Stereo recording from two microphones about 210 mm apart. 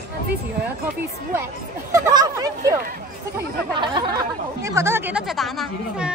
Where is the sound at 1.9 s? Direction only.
15° right (ahead or behind).